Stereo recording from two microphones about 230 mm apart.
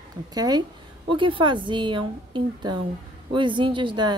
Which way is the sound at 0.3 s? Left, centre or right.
Centre.